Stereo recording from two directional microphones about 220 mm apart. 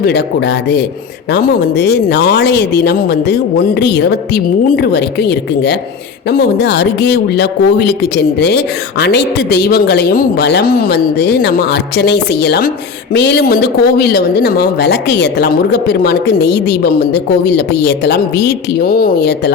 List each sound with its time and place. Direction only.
0.0 s speech: 50° left (ahead or behind)